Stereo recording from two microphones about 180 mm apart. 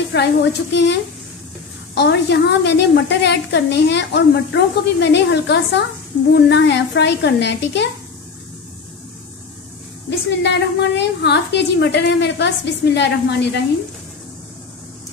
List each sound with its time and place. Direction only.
0.1 s a woman's voice: 70° left (ahead or behind)
2.0 s a woman's voice: 70° left (ahead or behind)
10.0 s a woman's voice: 75° left (ahead or behind)